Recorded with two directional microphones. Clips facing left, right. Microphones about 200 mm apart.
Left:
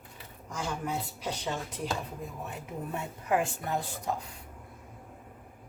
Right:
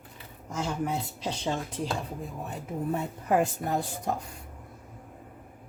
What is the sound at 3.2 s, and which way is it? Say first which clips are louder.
Speech: right 3 dB; 40° right (ahead or behind).